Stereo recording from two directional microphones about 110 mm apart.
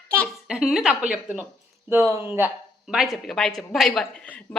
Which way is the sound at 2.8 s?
Centre (ahead or behind).